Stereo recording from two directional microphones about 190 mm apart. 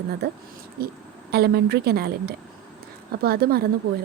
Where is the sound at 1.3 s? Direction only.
55° right (ahead or behind).